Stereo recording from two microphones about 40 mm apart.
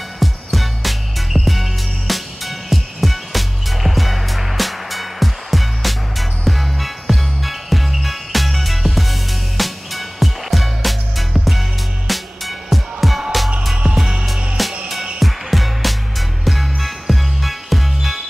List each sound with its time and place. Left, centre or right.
0.2 s music: centre
13.9 s music: centre
14.2 s music: centre